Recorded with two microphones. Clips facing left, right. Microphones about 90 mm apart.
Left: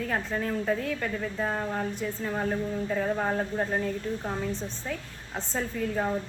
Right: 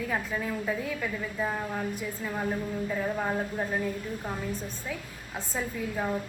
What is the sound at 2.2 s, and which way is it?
Speech, 25° left (ahead or behind).